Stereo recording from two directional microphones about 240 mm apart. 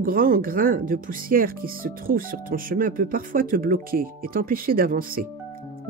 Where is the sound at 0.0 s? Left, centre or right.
Right.